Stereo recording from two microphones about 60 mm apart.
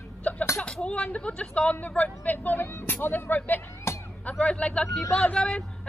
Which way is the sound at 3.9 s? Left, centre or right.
Left.